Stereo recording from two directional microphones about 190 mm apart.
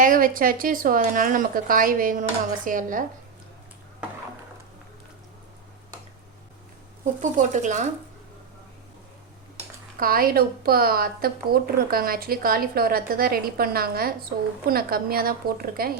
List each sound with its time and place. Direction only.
0.0 s a woman's voice: 45° right (ahead or behind)
7.0 s speech: 40° right (ahead or behind)
10.0 s a woman's voice: 50° right (ahead or behind)